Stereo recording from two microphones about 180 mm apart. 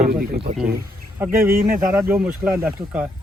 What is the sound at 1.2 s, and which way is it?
Speech, 10° right (ahead or behind).